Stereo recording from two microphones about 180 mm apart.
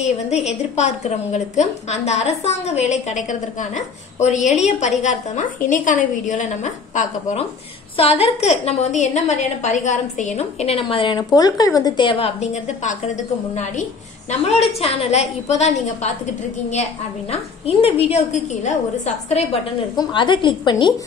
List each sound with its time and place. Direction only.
0.0 s a woman's voice: 40° left (ahead or behind)
14.5 s a woman's voice: 35° left (ahead or behind)
17.3 s a woman's voice: 30° left (ahead or behind)
20.0 s a woman's voice: 25° left (ahead or behind)